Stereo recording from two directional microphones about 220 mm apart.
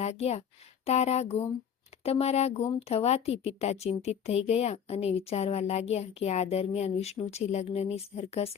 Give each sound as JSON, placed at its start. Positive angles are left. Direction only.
{"t": 0.0, "sound": "speech", "side_deg": 30}